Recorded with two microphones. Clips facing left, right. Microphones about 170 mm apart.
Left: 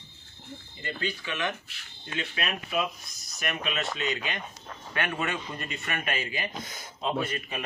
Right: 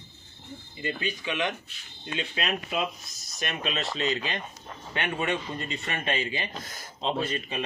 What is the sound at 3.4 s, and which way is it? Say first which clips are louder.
Speech: even; 35° right (ahead or behind).